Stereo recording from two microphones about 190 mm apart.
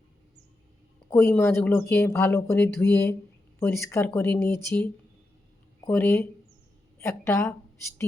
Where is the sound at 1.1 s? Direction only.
10° left (ahead or behind).